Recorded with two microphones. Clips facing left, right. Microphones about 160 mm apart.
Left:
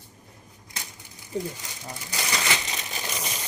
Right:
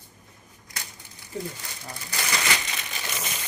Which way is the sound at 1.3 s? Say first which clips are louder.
Left 3 dB; 15° left (ahead or behind).